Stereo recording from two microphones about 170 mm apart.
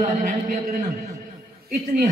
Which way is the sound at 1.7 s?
65° right (ahead or behind).